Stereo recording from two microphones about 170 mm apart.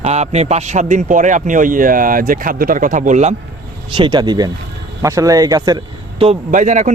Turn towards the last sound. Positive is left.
turn(degrees=-50)  # may be behind; listen again after turning